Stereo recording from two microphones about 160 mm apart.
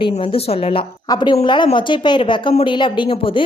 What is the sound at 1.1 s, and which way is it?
A woman's voice, 25° left (ahead or behind).